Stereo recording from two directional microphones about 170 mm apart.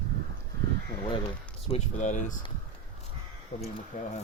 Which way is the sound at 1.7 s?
45° left (ahead or behind).